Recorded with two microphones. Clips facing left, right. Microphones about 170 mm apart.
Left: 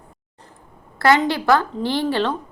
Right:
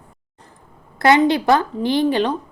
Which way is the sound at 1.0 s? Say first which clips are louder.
Right 3 dB; 20° right (ahead or behind).